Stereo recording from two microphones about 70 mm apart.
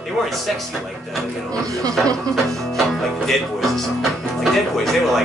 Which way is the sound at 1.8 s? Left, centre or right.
Right.